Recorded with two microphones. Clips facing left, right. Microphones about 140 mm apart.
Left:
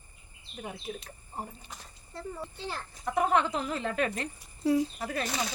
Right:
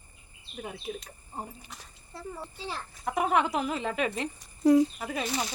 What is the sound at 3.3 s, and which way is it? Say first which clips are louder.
A child's voice: right 1 dB; 10° right (ahead or behind).